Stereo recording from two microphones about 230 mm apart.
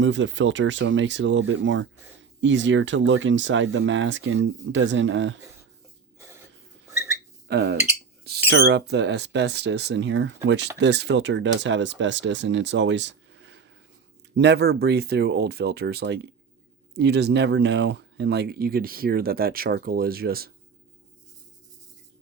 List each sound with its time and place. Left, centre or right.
0.0 s speech: right
7.4 s speech: right